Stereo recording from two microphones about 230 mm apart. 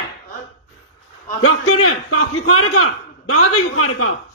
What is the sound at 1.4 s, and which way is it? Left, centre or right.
A man's voice, left.